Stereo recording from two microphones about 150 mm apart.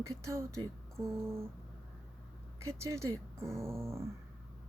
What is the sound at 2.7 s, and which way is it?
Speech, 20° right (ahead or behind).